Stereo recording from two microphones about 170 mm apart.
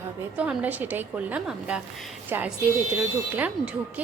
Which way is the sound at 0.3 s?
10° right (ahead or behind).